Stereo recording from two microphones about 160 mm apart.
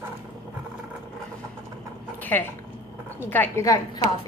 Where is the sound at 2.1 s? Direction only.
10° left (ahead or behind).